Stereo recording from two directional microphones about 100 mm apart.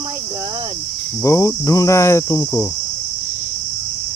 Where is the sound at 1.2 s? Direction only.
30° left (ahead or behind).